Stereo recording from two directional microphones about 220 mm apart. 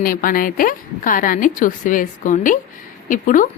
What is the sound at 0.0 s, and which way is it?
A woman's voice, 40° left (ahead or behind).